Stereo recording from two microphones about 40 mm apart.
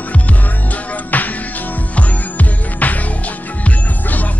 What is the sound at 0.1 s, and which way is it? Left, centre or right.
Music, left.